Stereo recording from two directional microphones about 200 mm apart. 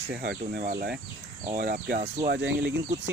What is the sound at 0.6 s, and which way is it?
Speech, 45° right (ahead or behind).